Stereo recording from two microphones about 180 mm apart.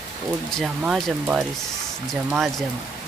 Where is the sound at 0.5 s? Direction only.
Centre (ahead or behind).